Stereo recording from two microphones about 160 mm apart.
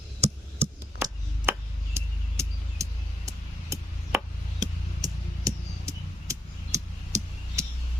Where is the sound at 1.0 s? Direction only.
15° right (ahead or behind).